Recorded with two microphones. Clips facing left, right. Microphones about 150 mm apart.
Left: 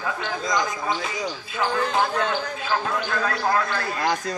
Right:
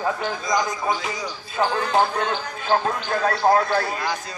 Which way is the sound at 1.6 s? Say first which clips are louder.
Right 3 dB; 30° right (ahead or behind).